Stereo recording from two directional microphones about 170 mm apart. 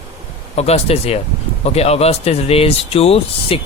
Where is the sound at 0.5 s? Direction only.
40° left (ahead or behind).